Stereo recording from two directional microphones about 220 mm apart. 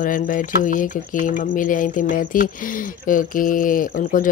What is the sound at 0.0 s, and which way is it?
Speech, 35° left (ahead or behind).